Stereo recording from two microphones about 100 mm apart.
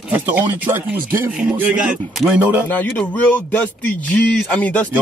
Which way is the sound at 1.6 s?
10° right (ahead or behind).